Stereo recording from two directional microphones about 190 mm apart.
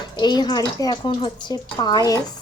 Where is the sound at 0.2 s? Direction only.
20° left (ahead or behind).